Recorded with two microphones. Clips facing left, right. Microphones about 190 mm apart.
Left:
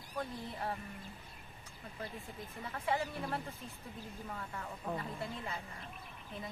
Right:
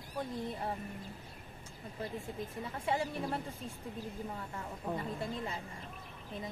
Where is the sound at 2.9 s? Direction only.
25° right (ahead or behind).